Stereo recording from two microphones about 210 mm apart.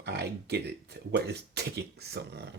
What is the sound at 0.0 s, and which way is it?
Speech, 50° right (ahead or behind).